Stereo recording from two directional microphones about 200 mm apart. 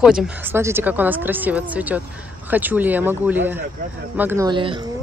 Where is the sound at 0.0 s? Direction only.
Centre (ahead or behind).